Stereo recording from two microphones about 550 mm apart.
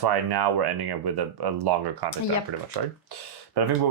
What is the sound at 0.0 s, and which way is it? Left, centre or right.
Speech, right.